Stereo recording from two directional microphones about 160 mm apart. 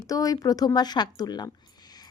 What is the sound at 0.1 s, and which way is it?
Speech, 20° left (ahead or behind).